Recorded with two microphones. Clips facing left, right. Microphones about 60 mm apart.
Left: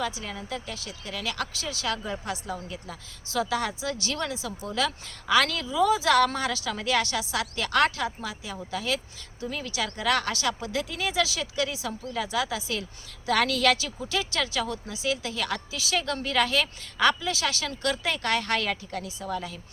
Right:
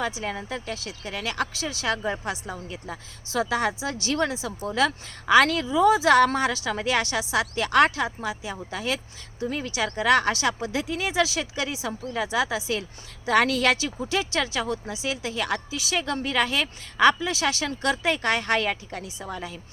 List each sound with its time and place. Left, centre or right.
0.0 s speech: right